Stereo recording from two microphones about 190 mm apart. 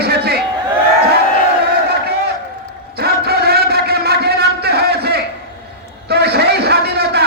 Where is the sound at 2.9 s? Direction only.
55° right (ahead or behind).